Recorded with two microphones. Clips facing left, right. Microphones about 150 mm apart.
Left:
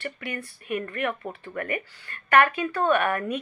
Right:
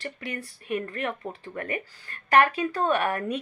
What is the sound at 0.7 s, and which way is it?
Speech, 35° right (ahead or behind).